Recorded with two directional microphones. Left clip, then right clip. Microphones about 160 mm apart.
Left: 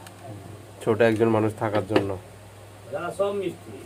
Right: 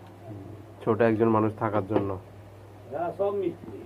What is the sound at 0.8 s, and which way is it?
Speech, 25° left (ahead or behind).